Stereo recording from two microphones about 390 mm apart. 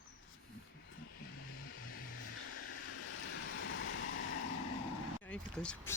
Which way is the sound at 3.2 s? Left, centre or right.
Left.